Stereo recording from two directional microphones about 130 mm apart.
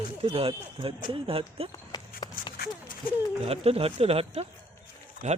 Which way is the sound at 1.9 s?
30° left (ahead or behind).